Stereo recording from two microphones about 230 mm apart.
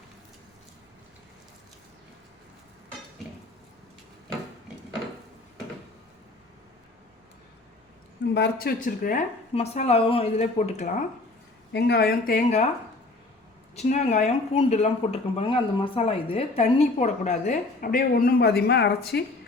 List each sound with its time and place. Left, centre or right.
8.3 s speech: left
11.7 s speech: left
13.7 s speech: left